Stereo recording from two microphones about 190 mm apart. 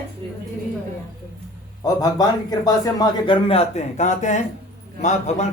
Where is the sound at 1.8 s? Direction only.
20° left (ahead or behind).